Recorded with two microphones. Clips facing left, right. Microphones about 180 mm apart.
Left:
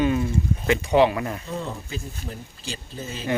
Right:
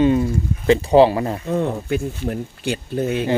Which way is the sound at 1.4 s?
60° right (ahead or behind).